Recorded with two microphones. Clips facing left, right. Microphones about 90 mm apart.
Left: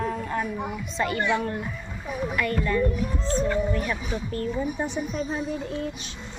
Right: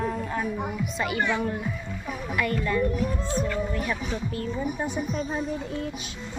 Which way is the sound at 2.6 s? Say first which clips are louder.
Left 2 dB; 10° right (ahead or behind).